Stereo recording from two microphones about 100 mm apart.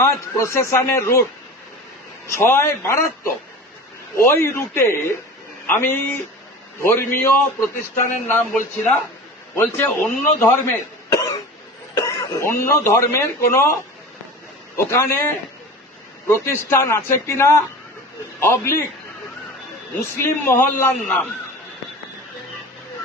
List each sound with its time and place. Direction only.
0.0 s a man's voice: 30° left (ahead or behind)
2.3 s a man's voice: 25° left (ahead or behind)
4.2 s a man's voice: 25° left (ahead or behind)
9.8 s a man's voice: 15° left (ahead or behind)
11.9 s speech: 40° left (ahead or behind)
14.9 s a man's voice: 25° left (ahead or behind)
19.9 s a man's voice: 25° left (ahead or behind)